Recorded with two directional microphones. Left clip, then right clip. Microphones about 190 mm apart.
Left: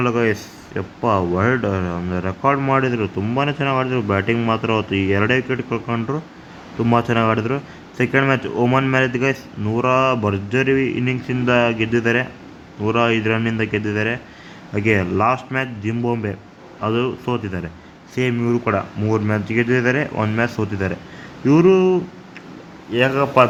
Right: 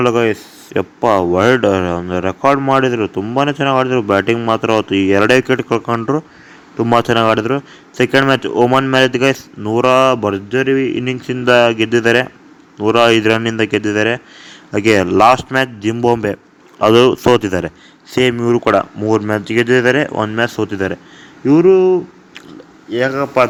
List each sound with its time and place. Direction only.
0.0 s a man's voice: 40° right (ahead or behind)
18.1 s a man's voice: 40° right (ahead or behind); by 23.5 s 20° right (ahead or behind)